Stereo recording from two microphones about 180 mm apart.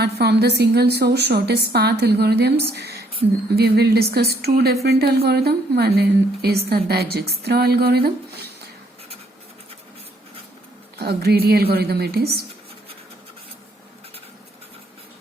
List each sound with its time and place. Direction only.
0.0 s a woman's voice: 65° right (ahead or behind)
10.9 s a woman's voice: 60° right (ahead or behind)